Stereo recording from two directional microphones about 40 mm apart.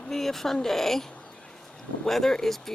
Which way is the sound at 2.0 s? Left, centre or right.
Centre.